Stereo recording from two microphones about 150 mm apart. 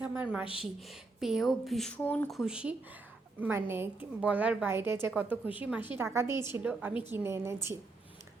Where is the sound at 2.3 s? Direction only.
5° right (ahead or behind).